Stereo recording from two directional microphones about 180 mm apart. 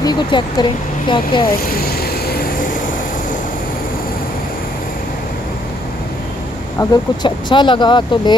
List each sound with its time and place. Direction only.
0.0 s speech: 25° left (ahead or behind)
1.5 s vehicle: 55° left (ahead or behind)
6.8 s speech: 25° left (ahead or behind)